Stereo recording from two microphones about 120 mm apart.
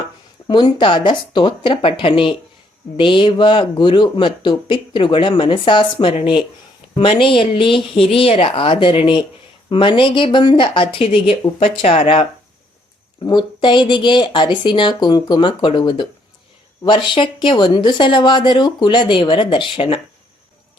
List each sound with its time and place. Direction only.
0.4 s speech: 40° left (ahead or behind)
13.2 s speech: 40° left (ahead or behind)